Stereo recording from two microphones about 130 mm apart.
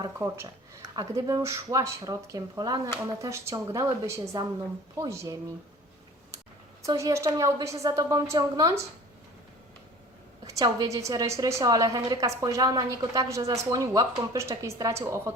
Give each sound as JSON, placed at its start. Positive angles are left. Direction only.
{"t": 0.9, "sound": "a woman's voice", "side_deg": -25}
{"t": 6.8, "sound": "a woman's voice", "side_deg": -25}
{"t": 10.4, "sound": "a woman's voice", "side_deg": -25}